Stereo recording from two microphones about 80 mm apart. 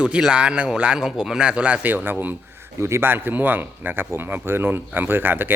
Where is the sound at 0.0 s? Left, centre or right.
Centre.